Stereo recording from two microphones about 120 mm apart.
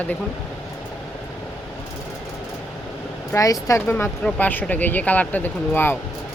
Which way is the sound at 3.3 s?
25° left (ahead or behind).